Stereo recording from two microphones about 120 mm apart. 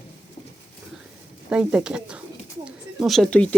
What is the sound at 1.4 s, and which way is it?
Speech, 10° right (ahead or behind).